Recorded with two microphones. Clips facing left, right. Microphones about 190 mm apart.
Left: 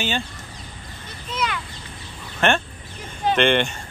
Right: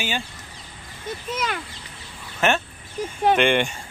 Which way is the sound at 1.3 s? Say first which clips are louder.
Left 2 dB; 45° right (ahead or behind).